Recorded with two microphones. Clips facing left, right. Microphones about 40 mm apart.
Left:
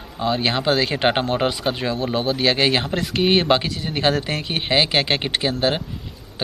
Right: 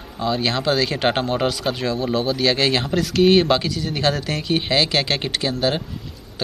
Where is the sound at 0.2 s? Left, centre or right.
Centre.